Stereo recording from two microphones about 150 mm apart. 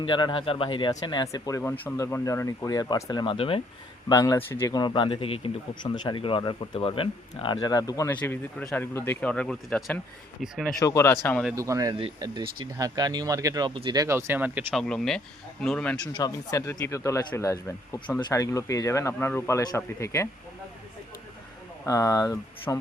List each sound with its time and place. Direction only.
0.0 s speech: 35° left (ahead or behind)
3.3 s speech: 40° left (ahead or behind)
4.1 s speech: 25° left (ahead or behind)
4.7 s speech: 30° left (ahead or behind)
8.1 s speech: 10° left (ahead or behind)
9.3 s speech: 5° left (ahead or behind)
10.8 s speech: 20° left (ahead or behind)
11.5 s speech: 20° right (ahead or behind)
14.7 s speech: 5° left (ahead or behind)
16.1 s speech: 25° left (ahead or behind)
21.8 s speech: 20° left (ahead or behind)